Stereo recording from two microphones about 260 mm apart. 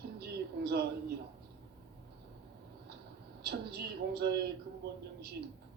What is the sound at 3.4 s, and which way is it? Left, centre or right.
Speech, right.